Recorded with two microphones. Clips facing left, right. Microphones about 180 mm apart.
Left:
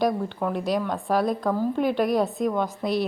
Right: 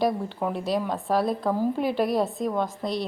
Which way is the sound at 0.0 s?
5° right (ahead or behind).